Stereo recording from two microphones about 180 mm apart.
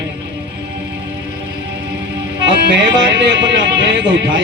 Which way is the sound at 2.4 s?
75° right (ahead or behind).